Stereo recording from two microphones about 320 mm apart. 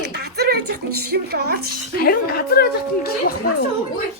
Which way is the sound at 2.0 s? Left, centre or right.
Left.